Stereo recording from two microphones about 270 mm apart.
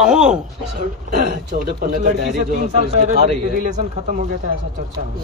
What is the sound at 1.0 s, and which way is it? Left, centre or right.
A man's voice, right.